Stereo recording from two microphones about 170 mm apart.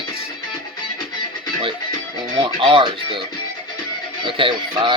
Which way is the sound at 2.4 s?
30° right (ahead or behind).